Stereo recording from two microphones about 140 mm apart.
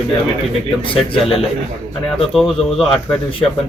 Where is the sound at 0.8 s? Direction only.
40° left (ahead or behind).